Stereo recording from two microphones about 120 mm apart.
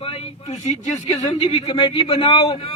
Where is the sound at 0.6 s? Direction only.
80° left.